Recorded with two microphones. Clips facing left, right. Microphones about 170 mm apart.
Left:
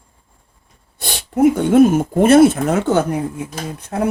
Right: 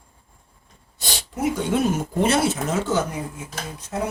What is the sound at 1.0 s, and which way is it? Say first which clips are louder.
Speech: left 11 dB; 55° left (ahead or behind).